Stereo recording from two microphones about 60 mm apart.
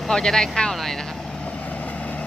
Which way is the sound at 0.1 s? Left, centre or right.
Centre.